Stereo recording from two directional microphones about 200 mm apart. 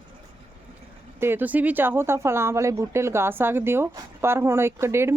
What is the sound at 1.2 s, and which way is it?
A woman's voice, 10° right (ahead or behind).